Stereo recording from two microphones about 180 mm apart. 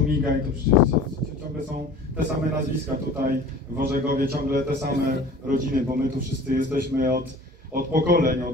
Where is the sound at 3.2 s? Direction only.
60° right (ahead or behind).